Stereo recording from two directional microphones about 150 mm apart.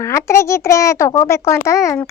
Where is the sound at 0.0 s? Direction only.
20° left (ahead or behind).